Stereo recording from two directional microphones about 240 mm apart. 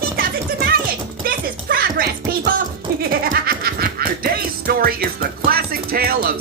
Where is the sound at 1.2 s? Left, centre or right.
Right.